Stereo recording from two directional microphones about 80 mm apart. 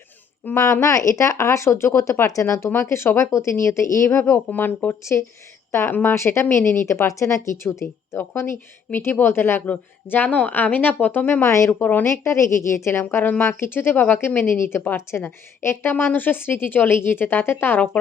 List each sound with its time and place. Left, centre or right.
0.4 s a woman's voice: left
4.4 s a woman's voice: left
11.4 s a woman's voice: left
11.7 s speech: left
12.0 s a woman's voice: left